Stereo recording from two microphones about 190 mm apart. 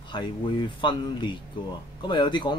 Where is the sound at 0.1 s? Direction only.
25° left (ahead or behind).